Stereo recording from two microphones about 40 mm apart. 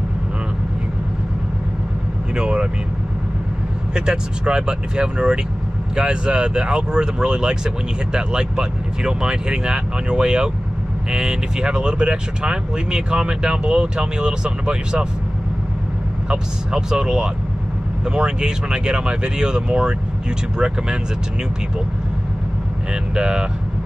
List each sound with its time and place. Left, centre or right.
2.3 s speech: right
3.9 s speech: centre
16.3 s speech: centre
23.1 s speech: centre